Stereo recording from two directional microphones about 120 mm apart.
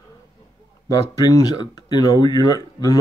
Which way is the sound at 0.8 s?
30° left (ahead or behind).